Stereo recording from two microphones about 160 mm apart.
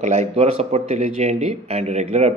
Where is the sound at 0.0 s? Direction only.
45° right (ahead or behind).